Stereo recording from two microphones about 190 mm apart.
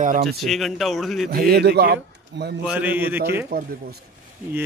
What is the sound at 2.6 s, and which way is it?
Speech, 10° right (ahead or behind).